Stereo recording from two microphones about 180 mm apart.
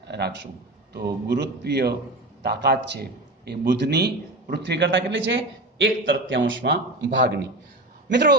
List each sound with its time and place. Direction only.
0.0 s a man's voice: 65° right (ahead or behind)